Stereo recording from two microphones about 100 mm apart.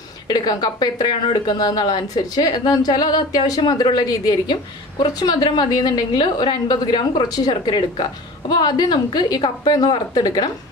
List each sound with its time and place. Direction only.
0.3 s a woman's voice: 45° left (ahead or behind)